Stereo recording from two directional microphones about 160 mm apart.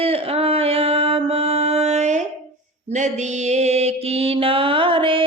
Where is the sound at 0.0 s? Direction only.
35° right (ahead or behind).